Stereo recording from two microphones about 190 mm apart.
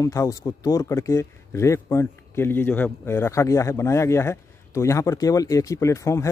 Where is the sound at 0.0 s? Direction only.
15° left (ahead or behind).